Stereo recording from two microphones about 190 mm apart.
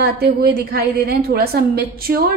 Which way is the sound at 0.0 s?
55° right (ahead or behind).